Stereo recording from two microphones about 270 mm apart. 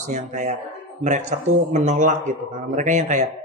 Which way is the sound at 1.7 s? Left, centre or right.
Right.